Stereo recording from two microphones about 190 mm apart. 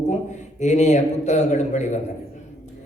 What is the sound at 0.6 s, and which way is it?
A man's voice, 40° left (ahead or behind).